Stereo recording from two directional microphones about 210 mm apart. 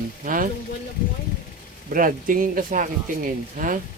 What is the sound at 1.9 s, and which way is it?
Speech, 40° right (ahead or behind).